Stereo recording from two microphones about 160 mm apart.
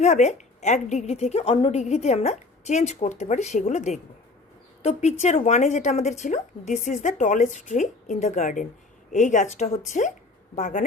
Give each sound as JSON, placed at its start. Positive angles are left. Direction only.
{"t": 0.0, "sound": "a woman's voice", "side_deg": 45}